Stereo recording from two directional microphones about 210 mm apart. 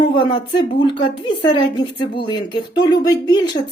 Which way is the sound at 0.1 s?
25° left (ahead or behind).